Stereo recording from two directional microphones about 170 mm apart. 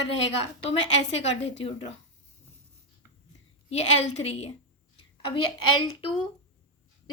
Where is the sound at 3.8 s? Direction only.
35° left (ahead or behind).